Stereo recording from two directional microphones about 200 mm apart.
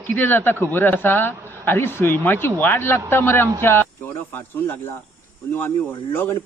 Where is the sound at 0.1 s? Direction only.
10° left (ahead or behind).